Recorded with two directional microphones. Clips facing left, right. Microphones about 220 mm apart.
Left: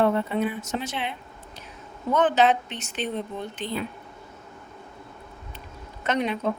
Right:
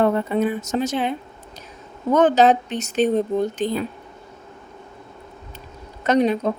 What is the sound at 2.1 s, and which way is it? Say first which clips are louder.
A woman's voice: right 5 dB; 40° right (ahead or behind).